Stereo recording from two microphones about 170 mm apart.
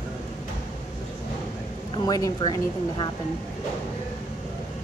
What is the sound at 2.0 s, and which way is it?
Speech, 20° left (ahead or behind).